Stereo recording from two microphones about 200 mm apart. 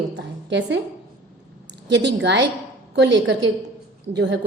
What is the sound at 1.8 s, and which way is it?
A woman's voice, 60° right (ahead or behind).